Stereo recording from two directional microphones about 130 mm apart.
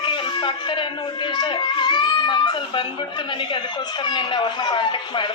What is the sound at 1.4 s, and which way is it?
Speech, 35° left (ahead or behind).